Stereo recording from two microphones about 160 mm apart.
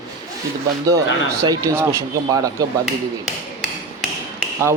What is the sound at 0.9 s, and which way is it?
Speech, 20° right (ahead or behind).